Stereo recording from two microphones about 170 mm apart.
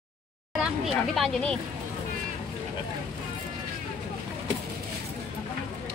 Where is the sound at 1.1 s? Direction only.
5° left (ahead or behind).